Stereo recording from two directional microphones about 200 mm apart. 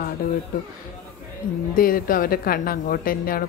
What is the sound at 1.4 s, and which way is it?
Speech, 45° left (ahead or behind).